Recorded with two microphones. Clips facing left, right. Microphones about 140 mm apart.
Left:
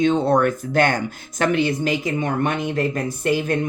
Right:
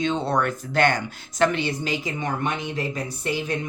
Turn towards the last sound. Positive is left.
turn(degrees=50)  # may be behind; listen again after turning